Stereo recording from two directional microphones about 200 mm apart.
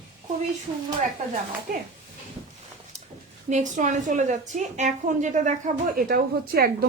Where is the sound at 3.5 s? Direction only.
40° right (ahead or behind).